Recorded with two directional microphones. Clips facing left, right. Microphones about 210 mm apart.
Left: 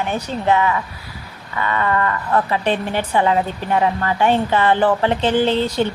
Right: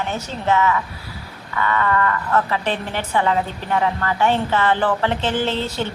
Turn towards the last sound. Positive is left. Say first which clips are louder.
# left 5 dB
turn(degrees=15)  # may be behind; listen again after turning